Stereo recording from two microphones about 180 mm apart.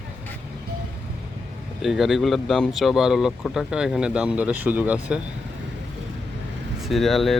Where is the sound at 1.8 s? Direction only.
Centre (ahead or behind).